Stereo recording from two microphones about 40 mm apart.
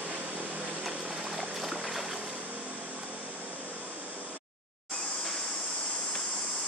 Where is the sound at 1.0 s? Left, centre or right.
Centre.